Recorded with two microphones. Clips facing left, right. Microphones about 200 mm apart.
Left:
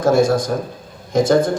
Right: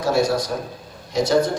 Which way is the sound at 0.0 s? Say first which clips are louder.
Left 5 dB; 50° left (ahead or behind).